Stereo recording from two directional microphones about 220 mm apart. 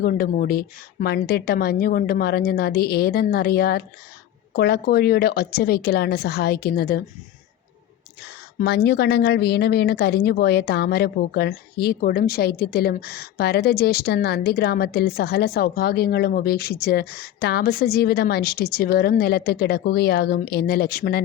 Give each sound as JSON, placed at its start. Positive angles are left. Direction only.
{"t": 0.0, "sound": "speech", "side_deg": 40}
{"t": 8.5, "sound": "speech", "side_deg": 50}